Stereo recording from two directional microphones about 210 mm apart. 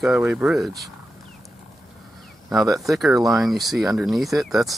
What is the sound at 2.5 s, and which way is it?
Speech, 15° right (ahead or behind).